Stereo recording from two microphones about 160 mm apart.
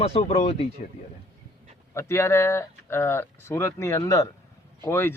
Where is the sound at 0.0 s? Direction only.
40° left (ahead or behind).